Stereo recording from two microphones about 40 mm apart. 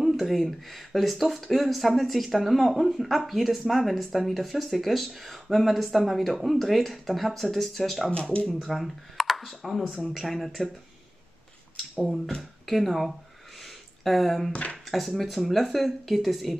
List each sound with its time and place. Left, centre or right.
0.0 s speech: centre
8.1 s speech: left
8.5 s speech: centre
12.4 s speech: centre
13.6 s a sound: centre
14.5 s speech: left
14.9 s speech: centre